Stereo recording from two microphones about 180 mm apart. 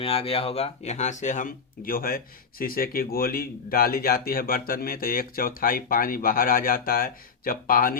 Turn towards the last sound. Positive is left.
turn(degrees=50)  # may be behind; listen again after turning